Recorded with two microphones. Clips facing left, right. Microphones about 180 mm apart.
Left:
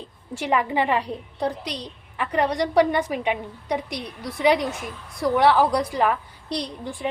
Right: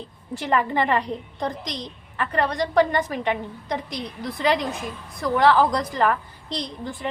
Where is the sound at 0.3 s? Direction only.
10° left (ahead or behind).